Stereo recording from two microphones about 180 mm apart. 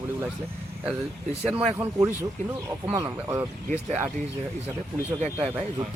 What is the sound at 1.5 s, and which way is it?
Speech, 10° right (ahead or behind).